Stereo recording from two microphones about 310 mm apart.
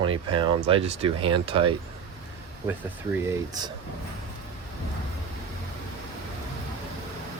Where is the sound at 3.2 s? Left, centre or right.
Centre.